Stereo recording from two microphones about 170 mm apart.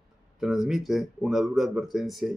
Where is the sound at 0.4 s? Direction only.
Centre (ahead or behind).